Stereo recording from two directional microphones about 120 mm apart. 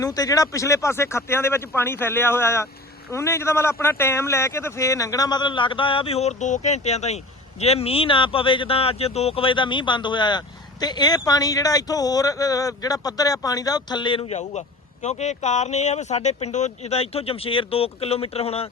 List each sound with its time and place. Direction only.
0.0 s a man's voice: 30° left (ahead or behind)
14.3 s a man's voice: 70° left (ahead or behind)